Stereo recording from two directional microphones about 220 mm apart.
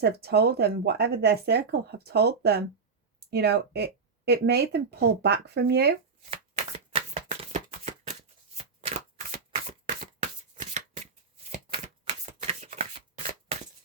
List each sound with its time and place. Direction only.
0.0 s speech: 45° right (ahead or behind)
6.9 s shuffling cards: 30° right (ahead or behind)
11.7 s typewriter: 30° right (ahead or behind)